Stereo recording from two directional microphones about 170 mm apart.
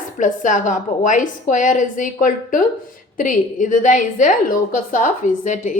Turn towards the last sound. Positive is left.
turn(degrees=45)  # may be behind; listen again after turning